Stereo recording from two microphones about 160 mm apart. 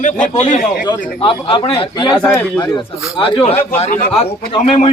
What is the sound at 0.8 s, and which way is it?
Speech, 35° left (ahead or behind).